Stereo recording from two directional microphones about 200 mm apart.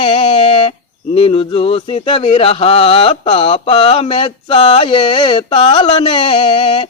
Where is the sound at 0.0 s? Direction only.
25° left (ahead or behind).